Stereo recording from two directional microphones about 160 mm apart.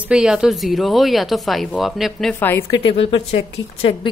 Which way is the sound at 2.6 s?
35° left (ahead or behind).